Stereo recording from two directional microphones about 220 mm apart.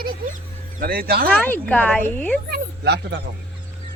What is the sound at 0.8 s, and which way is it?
Speech, 40° right (ahead or behind).